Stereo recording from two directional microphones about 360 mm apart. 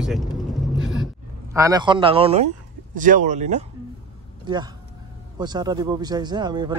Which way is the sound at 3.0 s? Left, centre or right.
Right.